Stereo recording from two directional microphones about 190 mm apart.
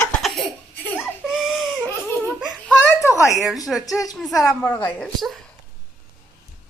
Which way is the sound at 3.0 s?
15° left (ahead or behind).